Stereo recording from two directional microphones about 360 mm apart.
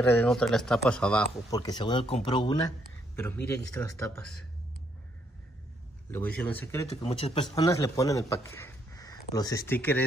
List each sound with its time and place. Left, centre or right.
0.0 s speech: centre
6.1 s speech: centre